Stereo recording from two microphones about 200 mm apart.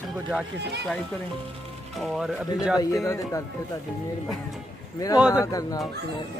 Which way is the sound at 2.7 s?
15° left (ahead or behind).